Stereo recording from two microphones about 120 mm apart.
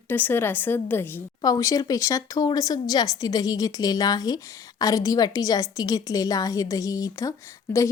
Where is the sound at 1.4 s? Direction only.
30° left (ahead or behind).